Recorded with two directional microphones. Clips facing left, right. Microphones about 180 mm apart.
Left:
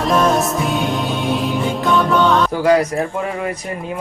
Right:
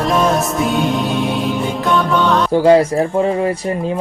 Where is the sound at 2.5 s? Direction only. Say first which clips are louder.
Right 4 dB; 30° right (ahead or behind).